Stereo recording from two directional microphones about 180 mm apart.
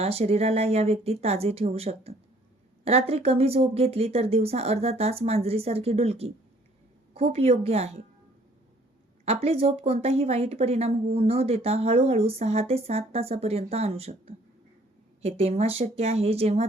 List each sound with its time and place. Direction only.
0.0 s speech: 35° right (ahead or behind)
9.2 s speech: 35° right (ahead or behind)